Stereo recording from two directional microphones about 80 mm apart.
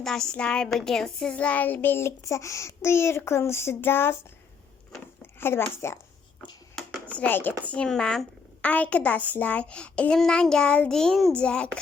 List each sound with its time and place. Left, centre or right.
0.0 s a child's voice: centre; by 4.2 s left
5.2 s a woman's voice: left
6.8 s computer keyboard: centre
7.1 s a child's voice: centre